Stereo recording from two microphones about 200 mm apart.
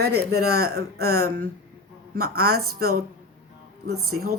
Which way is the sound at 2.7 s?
50° right (ahead or behind).